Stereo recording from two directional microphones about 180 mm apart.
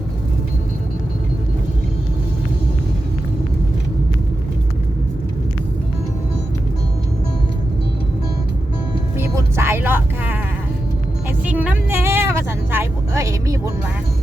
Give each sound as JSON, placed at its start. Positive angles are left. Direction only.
{"t": 9.1, "sound": "music", "side_deg": -15}
{"t": 11.4, "sound": "vehicle", "side_deg": -10}
{"t": 12.7, "sound": "music", "side_deg": -15}